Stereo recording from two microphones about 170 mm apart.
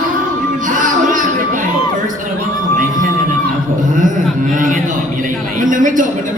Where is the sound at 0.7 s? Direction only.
50° right (ahead or behind).